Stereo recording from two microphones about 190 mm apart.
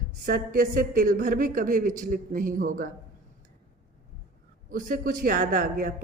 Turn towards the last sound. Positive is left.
turn(degrees=-45)  # may be behind; listen again after turning